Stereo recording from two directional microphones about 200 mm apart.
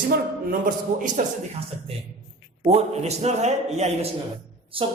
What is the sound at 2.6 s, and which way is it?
A man's voice, 35° right (ahead or behind).